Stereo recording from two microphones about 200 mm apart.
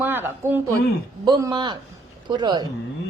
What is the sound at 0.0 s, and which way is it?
A woman's voice, 10° right (ahead or behind).